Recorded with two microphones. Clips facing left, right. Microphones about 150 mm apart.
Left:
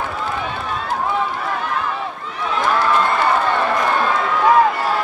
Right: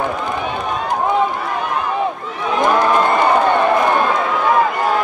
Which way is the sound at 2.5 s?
15° right (ahead or behind).